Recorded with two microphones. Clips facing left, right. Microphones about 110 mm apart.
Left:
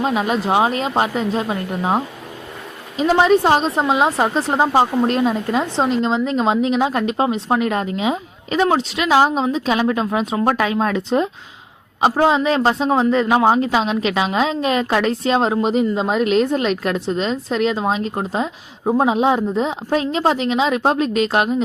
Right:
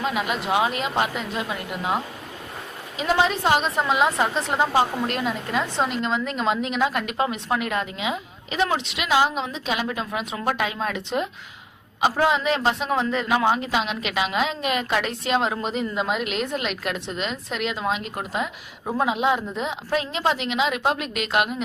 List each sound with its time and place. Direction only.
0.0 s a woman's voice: 35° left (ahead or behind)
3.0 s a woman's voice: 40° left (ahead or behind)